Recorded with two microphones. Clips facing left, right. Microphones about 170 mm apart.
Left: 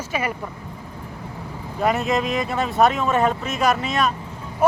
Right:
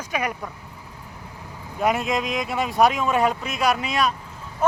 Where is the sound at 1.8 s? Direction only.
Centre (ahead or behind).